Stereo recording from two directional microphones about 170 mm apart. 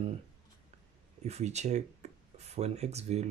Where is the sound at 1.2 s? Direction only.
40° right (ahead or behind).